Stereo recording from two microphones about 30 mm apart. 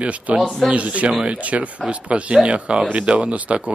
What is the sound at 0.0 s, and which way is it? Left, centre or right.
Speech, right.